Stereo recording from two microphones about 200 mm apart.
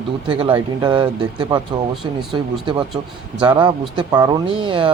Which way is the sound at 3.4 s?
25° right (ahead or behind).